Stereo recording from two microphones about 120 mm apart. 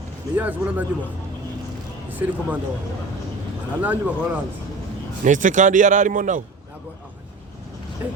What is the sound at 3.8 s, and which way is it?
Speech, 15° right (ahead or behind).